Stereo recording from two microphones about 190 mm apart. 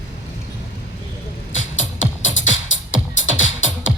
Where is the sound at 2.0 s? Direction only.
80° left.